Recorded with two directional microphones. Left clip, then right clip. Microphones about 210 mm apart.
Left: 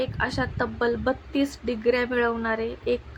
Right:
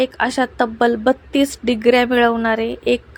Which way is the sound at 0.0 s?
40° right (ahead or behind).